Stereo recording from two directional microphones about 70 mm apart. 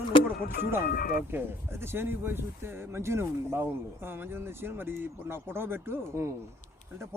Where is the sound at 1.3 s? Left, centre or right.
Right.